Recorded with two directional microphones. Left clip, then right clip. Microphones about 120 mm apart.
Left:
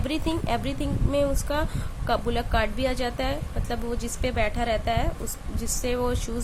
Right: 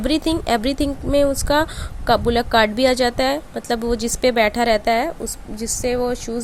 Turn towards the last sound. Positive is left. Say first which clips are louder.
# right 6 dB
turn(degrees=-30)  # may be behind; listen again after turning